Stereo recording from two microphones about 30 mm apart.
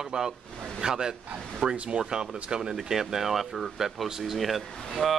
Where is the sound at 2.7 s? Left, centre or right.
Centre.